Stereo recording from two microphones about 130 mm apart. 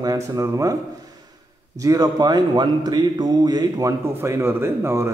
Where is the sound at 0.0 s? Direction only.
25° right (ahead or behind).